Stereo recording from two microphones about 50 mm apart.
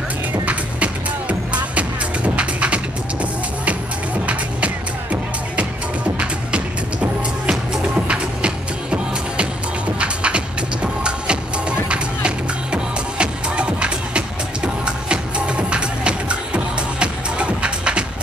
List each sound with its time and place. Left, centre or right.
1.5 s music: right
6.1 s music: right
12.7 s music: right